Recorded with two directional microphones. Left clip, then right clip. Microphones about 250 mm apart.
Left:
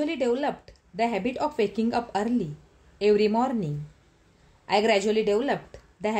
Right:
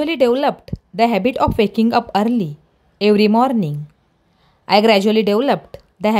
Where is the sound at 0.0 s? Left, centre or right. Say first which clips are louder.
Right 10 dB; right.